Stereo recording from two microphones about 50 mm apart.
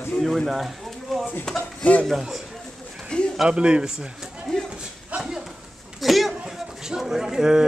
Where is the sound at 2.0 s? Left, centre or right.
Centre.